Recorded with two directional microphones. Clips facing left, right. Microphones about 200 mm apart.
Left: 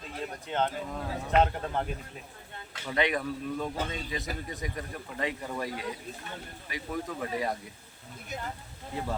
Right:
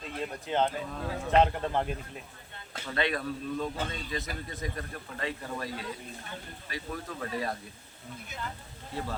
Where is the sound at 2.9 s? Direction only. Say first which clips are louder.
Left 2 dB; 15° left (ahead or behind).